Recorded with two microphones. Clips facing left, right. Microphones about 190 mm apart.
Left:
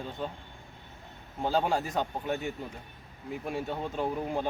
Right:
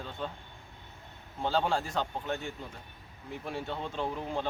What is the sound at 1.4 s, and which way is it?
A man's voice, 10° left (ahead or behind).